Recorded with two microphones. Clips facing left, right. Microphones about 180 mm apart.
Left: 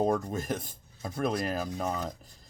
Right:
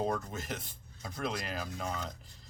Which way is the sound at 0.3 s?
45° left (ahead or behind).